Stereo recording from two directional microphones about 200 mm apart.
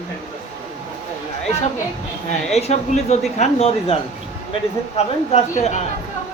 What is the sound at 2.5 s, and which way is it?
Speech, 35° left (ahead or behind).